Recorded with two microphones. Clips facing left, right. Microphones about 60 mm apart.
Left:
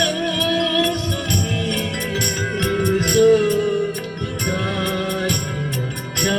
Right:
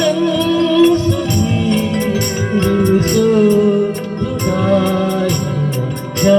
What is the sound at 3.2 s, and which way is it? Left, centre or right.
Music, right.